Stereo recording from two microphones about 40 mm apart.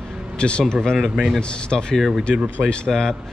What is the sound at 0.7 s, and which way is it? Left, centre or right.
Speech, centre.